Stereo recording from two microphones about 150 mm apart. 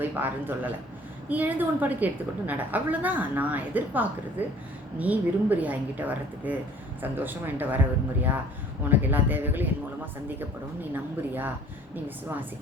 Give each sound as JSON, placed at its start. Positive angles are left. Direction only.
{"t": 0.0, "sound": "a man's voice", "side_deg": -10}
{"t": 8.8, "sound": "a woman's voice", "side_deg": -10}